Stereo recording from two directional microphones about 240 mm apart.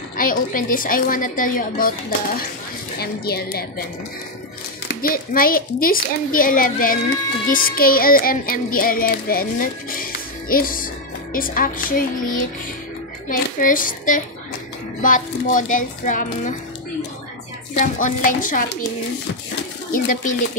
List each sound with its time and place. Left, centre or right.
0.2 s child singing: left
4.8 s child singing: left
13.6 s child singing: left
17.7 s child singing: left
19.9 s child singing: left